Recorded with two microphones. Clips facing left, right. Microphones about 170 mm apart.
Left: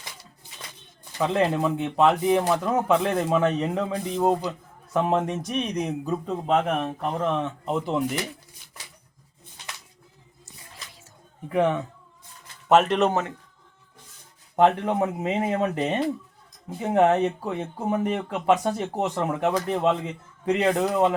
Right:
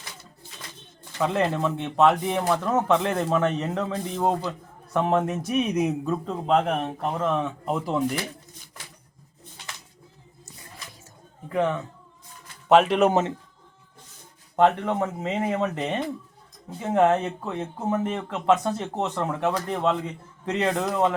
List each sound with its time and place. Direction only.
1.2 s a man's voice: centre (ahead or behind)
11.5 s a man's voice: 20° left (ahead or behind)
12.6 s speech: centre (ahead or behind)
13.1 s a man's voice: 20° right (ahead or behind)
14.5 s a man's voice: 15° left (ahead or behind)